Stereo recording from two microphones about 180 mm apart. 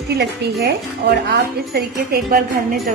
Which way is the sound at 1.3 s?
60° right (ahead or behind).